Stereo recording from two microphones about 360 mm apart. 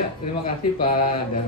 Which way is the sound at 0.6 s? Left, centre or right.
Left.